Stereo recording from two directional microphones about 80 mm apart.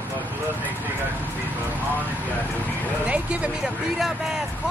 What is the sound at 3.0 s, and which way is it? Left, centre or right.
Speech, centre.